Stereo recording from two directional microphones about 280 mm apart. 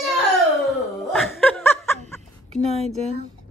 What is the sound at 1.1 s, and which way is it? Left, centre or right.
Snicker, centre.